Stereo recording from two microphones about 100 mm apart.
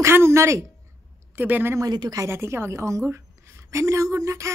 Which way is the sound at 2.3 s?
25° right (ahead or behind).